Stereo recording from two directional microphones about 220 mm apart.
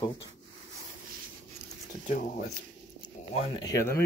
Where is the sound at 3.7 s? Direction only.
10° left (ahead or behind).